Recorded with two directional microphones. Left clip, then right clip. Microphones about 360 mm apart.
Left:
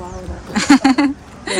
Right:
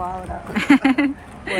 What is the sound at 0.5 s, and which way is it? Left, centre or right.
Speech, centre.